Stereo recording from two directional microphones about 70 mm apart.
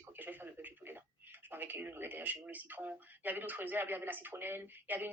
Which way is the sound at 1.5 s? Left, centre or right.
Right.